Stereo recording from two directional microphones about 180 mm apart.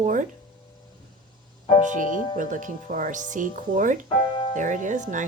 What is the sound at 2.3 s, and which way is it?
Speech, 45° right (ahead or behind).